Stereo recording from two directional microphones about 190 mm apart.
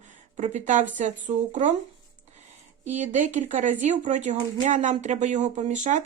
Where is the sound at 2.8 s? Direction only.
40° right (ahead or behind).